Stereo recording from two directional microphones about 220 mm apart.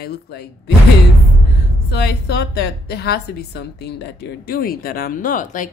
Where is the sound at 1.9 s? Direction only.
50° left (ahead or behind).